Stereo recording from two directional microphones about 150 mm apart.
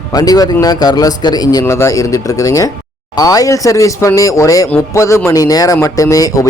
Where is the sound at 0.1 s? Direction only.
25° left (ahead or behind).